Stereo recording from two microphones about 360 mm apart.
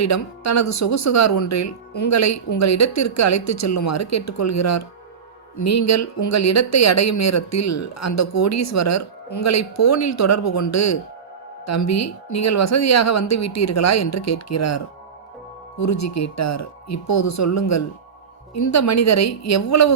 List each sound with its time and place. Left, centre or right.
0.0 s speech: left
15.8 s speech: left